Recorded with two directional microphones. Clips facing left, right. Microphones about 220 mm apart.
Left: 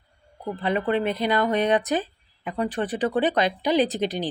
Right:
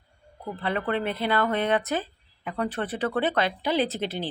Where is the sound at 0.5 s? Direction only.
15° left (ahead or behind).